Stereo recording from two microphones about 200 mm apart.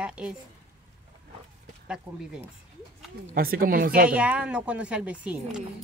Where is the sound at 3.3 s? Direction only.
45° right (ahead or behind).